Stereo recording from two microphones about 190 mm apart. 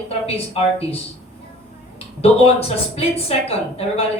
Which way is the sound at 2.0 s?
30° left (ahead or behind).